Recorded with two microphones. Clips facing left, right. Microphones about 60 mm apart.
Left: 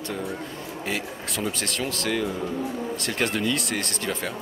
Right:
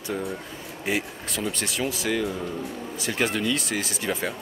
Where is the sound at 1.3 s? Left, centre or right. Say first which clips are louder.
Even; centre.